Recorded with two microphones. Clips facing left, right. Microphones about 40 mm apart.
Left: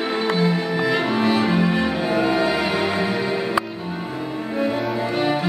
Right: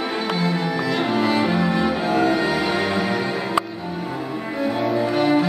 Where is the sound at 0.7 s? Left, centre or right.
Centre.